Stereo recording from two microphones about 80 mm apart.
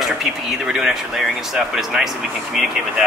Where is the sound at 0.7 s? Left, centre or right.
Centre.